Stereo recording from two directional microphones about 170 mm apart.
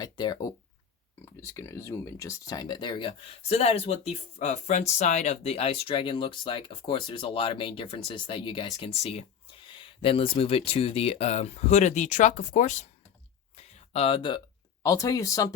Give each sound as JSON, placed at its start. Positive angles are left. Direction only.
{"t": 0.0, "sound": "speech", "side_deg": 25}
{"t": 13.6, "sound": "a sound", "side_deg": 35}
{"t": 14.8, "sound": "speech", "side_deg": 20}